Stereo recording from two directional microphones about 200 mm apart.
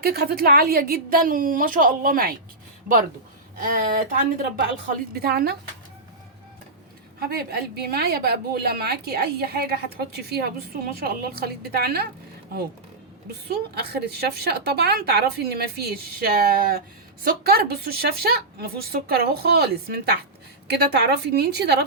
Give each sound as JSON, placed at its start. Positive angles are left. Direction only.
{"t": 0.0, "sound": "a woman's voice", "side_deg": -50}
{"t": 3.8, "sound": "a woman's voice", "side_deg": -40}
{"t": 7.2, "sound": "a woman's voice", "side_deg": -50}
{"t": 13.5, "sound": "a woman's voice", "side_deg": -50}